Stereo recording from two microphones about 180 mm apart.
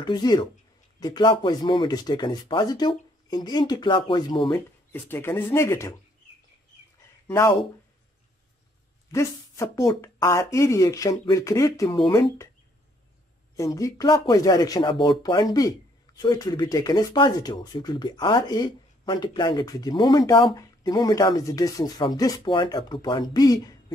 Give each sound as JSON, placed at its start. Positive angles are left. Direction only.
{"t": 0.0, "sound": "speech", "side_deg": 25}
{"t": 4.9, "sound": "speech", "side_deg": 10}
{"t": 7.2, "sound": "speech", "side_deg": 15}
{"t": 9.1, "sound": "speech", "side_deg": 15}
{"t": 13.7, "sound": "speech", "side_deg": 20}